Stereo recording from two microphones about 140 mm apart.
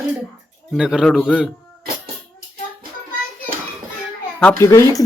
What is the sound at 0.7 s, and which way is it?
Speech, 5° right (ahead or behind).